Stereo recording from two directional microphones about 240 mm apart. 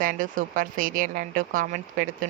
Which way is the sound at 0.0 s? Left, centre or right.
Right.